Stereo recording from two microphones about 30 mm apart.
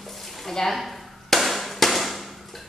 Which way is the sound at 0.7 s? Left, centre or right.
Centre.